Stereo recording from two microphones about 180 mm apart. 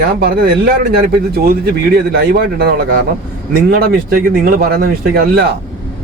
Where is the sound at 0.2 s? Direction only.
55° right (ahead or behind).